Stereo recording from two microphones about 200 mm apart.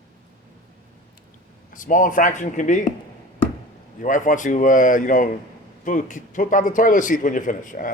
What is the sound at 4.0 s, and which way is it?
Speech, 40° left (ahead or behind).